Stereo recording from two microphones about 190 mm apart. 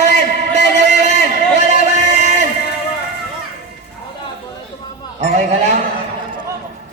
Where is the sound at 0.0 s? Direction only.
40° right (ahead or behind).